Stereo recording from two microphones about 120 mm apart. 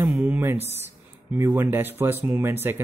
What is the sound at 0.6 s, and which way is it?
Speech, 60° right (ahead or behind).